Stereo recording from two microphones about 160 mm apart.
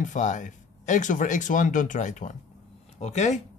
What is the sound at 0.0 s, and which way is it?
Speech, 50° left (ahead or behind).